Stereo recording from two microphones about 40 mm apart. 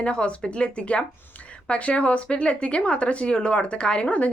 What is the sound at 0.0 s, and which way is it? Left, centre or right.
A woman's voice, left.